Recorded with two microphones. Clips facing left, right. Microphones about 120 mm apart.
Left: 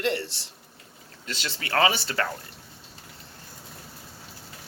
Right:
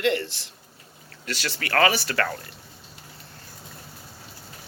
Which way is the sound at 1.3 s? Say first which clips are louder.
Right 4 dB; 75° right (ahead or behind).